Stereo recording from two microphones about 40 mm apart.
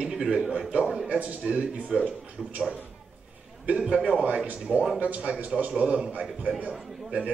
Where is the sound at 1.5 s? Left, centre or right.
Right.